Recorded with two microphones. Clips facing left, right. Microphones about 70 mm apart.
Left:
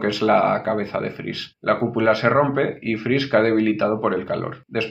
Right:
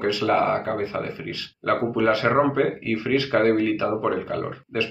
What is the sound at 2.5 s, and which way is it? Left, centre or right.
Speech, left.